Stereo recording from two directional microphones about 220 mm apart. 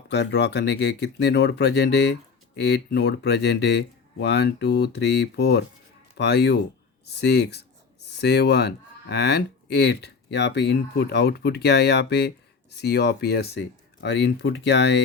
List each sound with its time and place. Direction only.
0.1 s speech: 50° left (ahead or behind)